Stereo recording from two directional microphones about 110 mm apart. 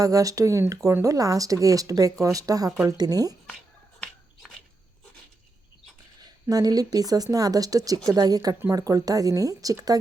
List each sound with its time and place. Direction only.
0.0 s speech: 30° right (ahead or behind)
6.1 s a woman's voice: 35° right (ahead or behind)